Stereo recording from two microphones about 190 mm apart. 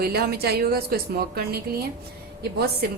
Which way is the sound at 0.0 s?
55° right (ahead or behind).